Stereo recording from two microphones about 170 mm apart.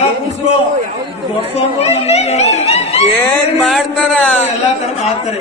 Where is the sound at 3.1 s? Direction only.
5° left (ahead or behind).